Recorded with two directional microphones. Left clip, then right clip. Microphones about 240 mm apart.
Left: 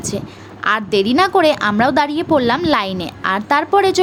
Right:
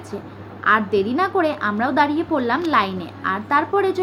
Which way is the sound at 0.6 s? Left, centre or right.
Left.